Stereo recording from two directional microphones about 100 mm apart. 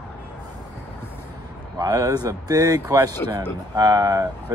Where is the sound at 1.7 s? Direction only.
35° right (ahead or behind).